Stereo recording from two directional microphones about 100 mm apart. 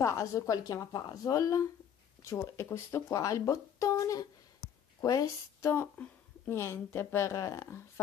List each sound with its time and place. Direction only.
0.0 s speech: 30° left (ahead or behind)